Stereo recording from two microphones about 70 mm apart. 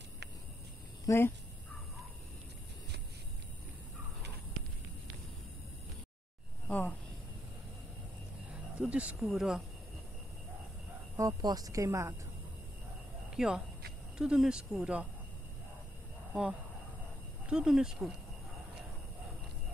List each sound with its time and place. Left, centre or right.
1.0 s speech: left
6.7 s a sound: left
8.7 s speech: centre
11.1 s speech: right
13.4 s speech: centre
17.5 s speech: centre